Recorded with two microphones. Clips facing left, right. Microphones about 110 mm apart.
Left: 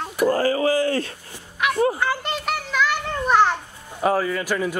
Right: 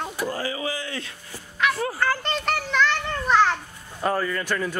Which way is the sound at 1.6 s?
20° left (ahead or behind).